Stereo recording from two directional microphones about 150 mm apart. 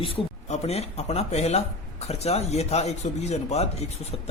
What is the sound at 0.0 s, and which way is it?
Speech, 40° left (ahead or behind).